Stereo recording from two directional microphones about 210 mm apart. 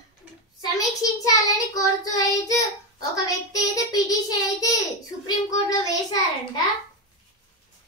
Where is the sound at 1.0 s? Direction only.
15° left (ahead or behind).